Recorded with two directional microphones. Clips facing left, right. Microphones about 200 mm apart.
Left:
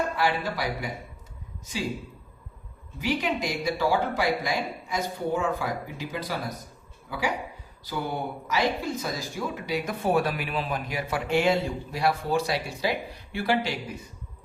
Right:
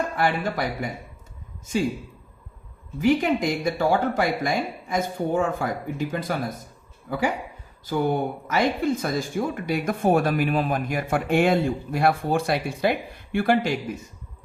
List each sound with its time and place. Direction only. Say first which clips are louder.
0.2 s speech: right 3 dB; 50° right (ahead or behind)
3.0 s speech: right 7 dB; 50° right (ahead or behind)